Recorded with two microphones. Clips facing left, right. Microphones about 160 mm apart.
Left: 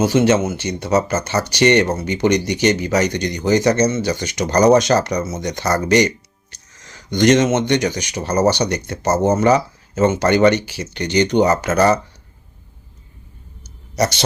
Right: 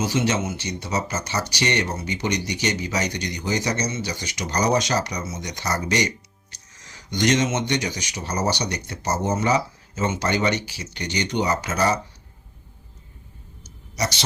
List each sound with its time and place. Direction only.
0.0 s speech: 55° left (ahead or behind)
13.9 s speech: 55° left (ahead or behind)